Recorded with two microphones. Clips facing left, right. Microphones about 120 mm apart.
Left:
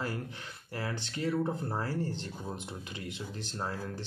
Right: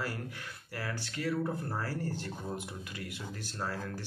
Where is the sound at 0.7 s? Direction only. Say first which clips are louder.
Left 2 dB; 25° left (ahead or behind).